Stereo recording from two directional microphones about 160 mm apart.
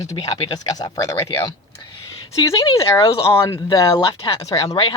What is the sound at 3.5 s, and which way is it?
Speech, 25° left (ahead or behind).